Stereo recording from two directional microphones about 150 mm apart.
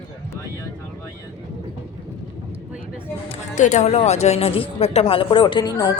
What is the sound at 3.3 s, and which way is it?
A woman's voice, 55° left (ahead or behind).